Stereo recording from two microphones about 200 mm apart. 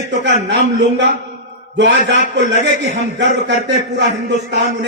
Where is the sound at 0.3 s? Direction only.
60° right (ahead or behind).